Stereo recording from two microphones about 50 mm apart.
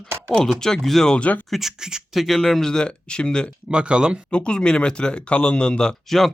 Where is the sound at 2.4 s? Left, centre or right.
Centre.